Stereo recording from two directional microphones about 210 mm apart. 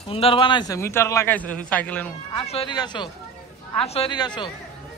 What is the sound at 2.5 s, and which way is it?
A woman's voice, 25° left (ahead or behind).